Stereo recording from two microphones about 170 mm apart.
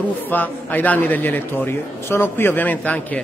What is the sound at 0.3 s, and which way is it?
A man's voice, 10° left (ahead or behind).